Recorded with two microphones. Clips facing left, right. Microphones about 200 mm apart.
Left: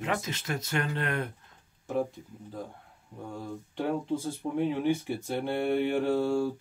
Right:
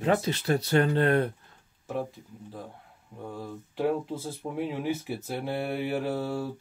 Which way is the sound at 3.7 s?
5° right (ahead or behind).